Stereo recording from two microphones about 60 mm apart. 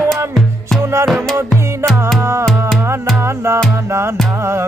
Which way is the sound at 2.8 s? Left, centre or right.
Right.